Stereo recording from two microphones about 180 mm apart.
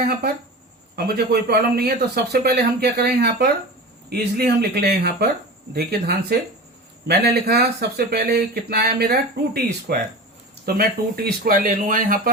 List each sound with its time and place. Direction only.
0.9 s speech: 60° right (ahead or behind)